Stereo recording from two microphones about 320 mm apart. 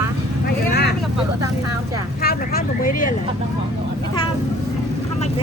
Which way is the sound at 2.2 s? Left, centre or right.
Left.